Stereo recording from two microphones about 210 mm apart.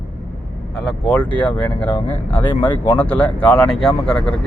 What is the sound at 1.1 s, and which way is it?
Speech, 5° left (ahead or behind).